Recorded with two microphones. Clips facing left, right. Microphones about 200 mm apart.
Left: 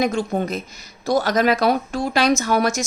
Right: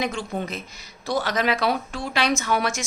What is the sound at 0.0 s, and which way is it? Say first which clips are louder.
Speech: left 7 dB; 40° left (ahead or behind).